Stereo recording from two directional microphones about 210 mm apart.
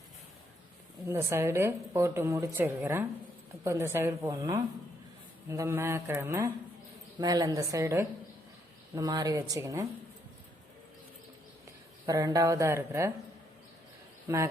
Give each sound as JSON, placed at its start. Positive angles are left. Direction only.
{"t": 1.0, "sound": "a woman's voice", "side_deg": -15}
{"t": 12.0, "sound": "a woman's voice", "side_deg": -15}